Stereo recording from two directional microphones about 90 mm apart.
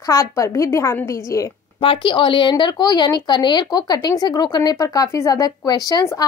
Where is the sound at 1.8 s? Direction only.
70° left (ahead or behind).